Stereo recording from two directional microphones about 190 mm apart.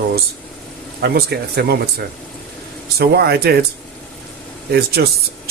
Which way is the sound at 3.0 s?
55° right (ahead or behind).